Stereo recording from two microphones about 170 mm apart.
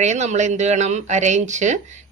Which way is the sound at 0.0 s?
45° right (ahead or behind).